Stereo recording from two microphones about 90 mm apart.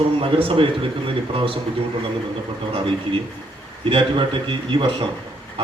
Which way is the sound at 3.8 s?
80° right.